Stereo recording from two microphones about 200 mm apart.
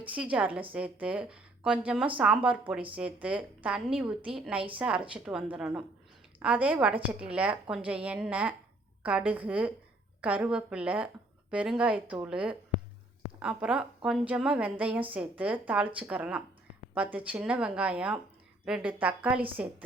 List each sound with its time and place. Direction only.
0.0 s a woman's voice: 5° right (ahead or behind)